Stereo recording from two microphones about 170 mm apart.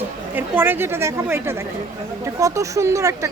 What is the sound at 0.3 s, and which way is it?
Speech, 10° right (ahead or behind).